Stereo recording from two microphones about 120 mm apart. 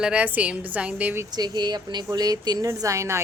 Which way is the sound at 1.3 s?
35° right (ahead or behind).